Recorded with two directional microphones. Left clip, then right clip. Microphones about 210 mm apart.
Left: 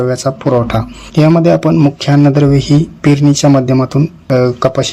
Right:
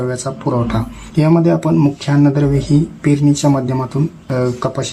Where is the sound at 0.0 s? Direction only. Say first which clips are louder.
Left 6 dB; 30° left (ahead or behind).